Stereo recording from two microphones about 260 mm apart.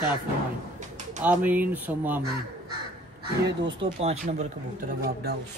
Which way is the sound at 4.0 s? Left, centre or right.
Right.